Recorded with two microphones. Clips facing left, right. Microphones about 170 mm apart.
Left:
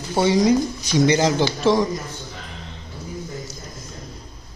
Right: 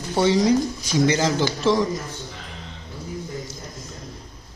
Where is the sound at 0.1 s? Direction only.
15° left (ahead or behind).